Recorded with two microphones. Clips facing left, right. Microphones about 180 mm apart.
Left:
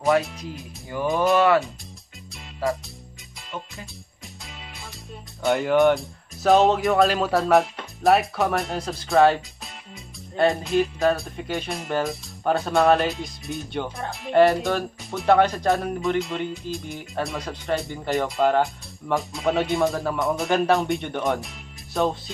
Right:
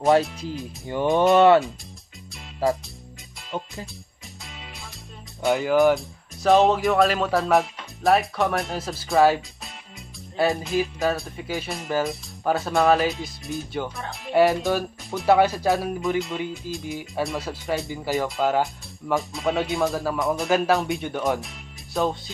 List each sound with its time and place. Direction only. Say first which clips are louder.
0.2 s speech: right 5 dB; centre (ahead or behind)
1.3 s speech: right 4 dB; 25° right (ahead or behind)
5.4 s speech: even; centre (ahead or behind)